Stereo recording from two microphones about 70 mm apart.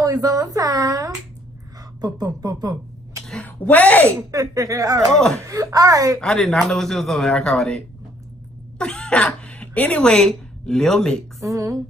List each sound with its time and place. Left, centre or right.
0.0 s speech: right
2.0 s speech: right
3.4 s speech: left
4.3 s speech: right
5.1 s a woman's voice: centre
5.5 s speech: right
6.2 s speech: centre
8.7 s cat: centre
10.0 s a woman's voice: centre
11.4 s a sound: right